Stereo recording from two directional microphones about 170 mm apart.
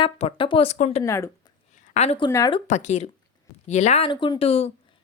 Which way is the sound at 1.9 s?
40° left (ahead or behind).